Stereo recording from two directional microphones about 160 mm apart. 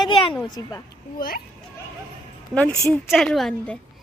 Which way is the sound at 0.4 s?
25° left (ahead or behind).